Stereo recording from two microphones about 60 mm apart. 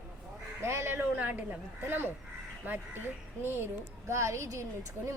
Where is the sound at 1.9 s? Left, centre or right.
Right.